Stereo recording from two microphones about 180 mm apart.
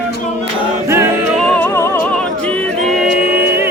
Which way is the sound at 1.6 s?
15° left (ahead or behind).